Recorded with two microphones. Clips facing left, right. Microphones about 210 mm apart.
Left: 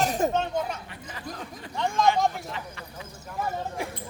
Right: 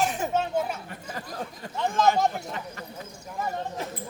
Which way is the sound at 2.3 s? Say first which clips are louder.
Right 2 dB; 45° right (ahead or behind).